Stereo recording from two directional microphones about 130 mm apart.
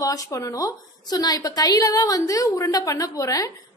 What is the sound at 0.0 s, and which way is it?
A woman's voice, 25° left (ahead or behind).